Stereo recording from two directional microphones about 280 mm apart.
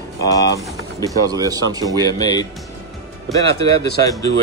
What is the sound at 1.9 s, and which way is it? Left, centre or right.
Speech, centre.